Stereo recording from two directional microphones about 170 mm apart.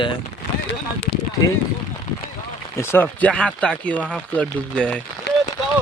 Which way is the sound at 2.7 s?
15° left (ahead or behind).